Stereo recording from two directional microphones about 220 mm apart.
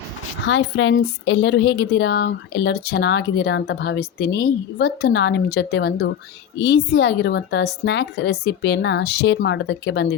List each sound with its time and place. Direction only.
0.4 s a woman's voice: 55° left (ahead or behind)